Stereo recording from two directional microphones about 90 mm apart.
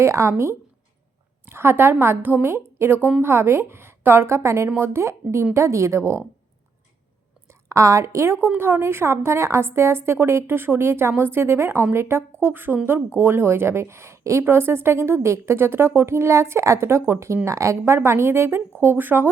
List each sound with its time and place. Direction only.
0.0 s a woman's voice: 30° right (ahead or behind)
7.4 s a woman's voice: 35° right (ahead or behind)